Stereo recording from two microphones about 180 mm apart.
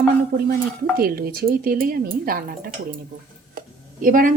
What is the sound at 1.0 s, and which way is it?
Speech, 55° right (ahead or behind).